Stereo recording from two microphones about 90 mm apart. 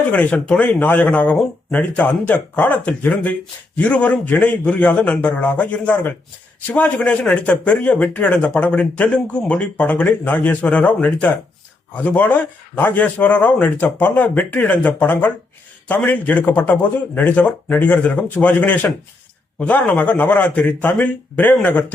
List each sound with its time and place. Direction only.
0.1 s speech: 15° left (ahead or behind)